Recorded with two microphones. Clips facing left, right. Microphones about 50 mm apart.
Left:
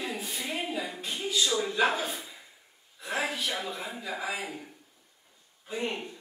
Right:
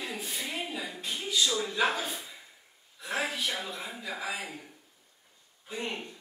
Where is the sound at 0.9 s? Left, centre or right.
Centre.